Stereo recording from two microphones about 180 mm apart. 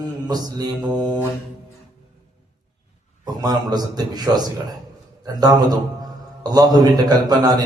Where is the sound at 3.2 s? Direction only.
20° right (ahead or behind).